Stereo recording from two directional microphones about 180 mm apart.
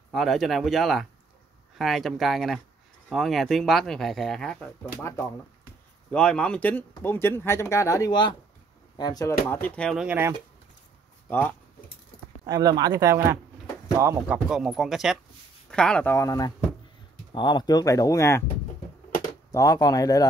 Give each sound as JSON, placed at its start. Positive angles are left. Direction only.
{"t": 0.1, "sound": "speech", "side_deg": 0}
{"t": 6.0, "sound": "speech", "side_deg": 5}
{"t": 10.0, "sound": "speech", "side_deg": -10}
{"t": 11.2, "sound": "speech", "side_deg": 10}
{"t": 12.4, "sound": "speech", "side_deg": -20}
{"t": 19.5, "sound": "speech", "side_deg": 20}